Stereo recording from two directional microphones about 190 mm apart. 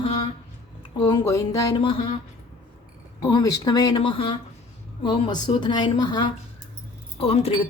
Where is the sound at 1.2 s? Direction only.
15° left (ahead or behind).